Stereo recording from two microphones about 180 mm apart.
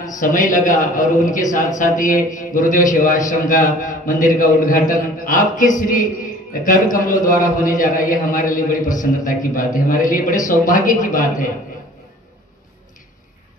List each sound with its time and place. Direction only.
0.2 s a man's voice: 45° left (ahead or behind)